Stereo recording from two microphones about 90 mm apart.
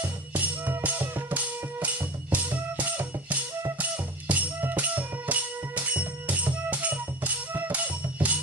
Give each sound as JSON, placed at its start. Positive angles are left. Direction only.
{"t": 0.0, "sound": "music", "side_deg": -20}